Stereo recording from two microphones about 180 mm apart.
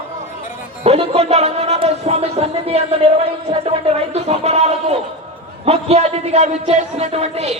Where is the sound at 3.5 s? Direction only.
35° right (ahead or behind).